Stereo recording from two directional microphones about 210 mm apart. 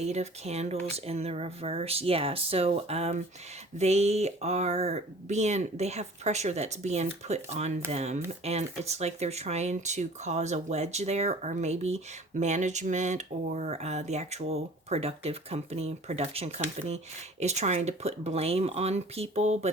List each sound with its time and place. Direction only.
0.0 s speech: 30° right (ahead or behind)